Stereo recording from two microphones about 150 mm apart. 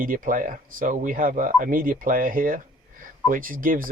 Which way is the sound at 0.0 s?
65° right (ahead or behind).